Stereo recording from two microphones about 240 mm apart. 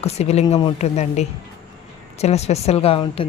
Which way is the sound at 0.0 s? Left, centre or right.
Left.